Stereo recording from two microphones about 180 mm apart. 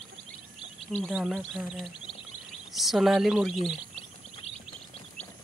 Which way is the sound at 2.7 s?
Centre (ahead or behind).